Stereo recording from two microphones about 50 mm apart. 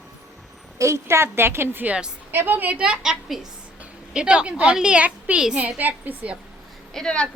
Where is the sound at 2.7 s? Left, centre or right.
Centre.